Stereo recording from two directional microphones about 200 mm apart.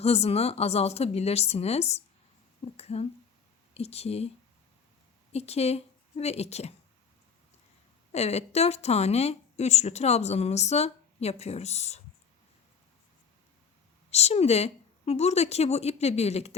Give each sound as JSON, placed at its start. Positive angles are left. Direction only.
{"t": 0.0, "sound": "a woman's voice", "side_deg": 30}
{"t": 5.3, "sound": "a woman's voice", "side_deg": 30}
{"t": 8.1, "sound": "a woman's voice", "side_deg": 30}
{"t": 14.1, "sound": "a woman's voice", "side_deg": 30}